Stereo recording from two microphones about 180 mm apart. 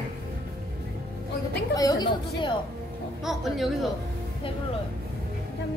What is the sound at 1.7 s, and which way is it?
Speech, 20° left (ahead or behind).